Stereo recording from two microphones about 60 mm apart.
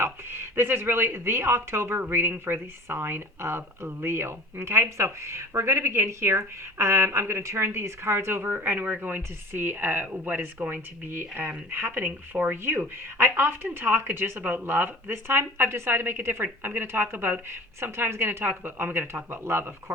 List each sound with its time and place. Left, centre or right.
0.0 s speech: right